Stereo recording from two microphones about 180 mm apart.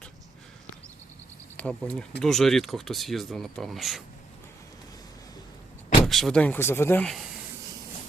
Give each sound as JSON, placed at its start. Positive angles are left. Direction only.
{"t": 1.5, "sound": "speech", "side_deg": 5}
{"t": 6.1, "sound": "speech", "side_deg": 0}